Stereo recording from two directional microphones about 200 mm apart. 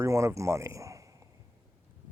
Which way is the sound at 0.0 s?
15° right (ahead or behind).